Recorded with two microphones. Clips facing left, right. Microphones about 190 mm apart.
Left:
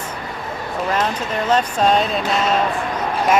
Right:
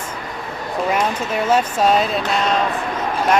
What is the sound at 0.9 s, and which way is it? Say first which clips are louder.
Speech: right 1 dB; 10° right (ahead or behind).